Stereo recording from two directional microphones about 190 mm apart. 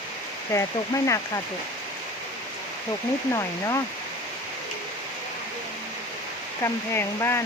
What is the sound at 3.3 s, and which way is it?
Speech, 15° left (ahead or behind).